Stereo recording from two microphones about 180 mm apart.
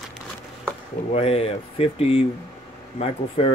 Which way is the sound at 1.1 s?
35° left (ahead or behind).